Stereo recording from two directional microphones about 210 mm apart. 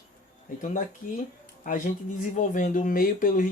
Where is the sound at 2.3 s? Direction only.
35° left (ahead or behind).